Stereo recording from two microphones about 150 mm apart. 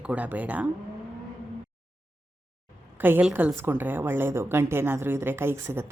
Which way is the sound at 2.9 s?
15° right (ahead or behind).